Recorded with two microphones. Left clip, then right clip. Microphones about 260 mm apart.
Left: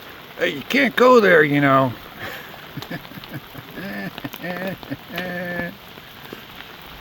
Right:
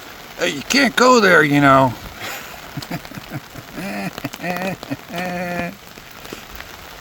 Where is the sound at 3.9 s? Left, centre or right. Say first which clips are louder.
Right 4 dB; centre.